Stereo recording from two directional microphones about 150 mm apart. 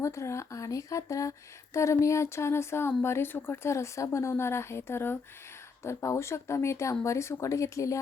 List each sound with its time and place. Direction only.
0.0 s speech: 20° left (ahead or behind)